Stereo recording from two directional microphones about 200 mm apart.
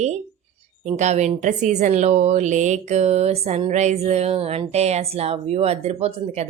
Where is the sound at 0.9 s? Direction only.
35° right (ahead or behind).